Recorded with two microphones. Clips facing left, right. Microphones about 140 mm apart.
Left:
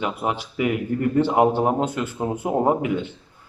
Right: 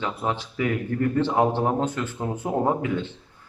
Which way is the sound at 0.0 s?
10° left (ahead or behind).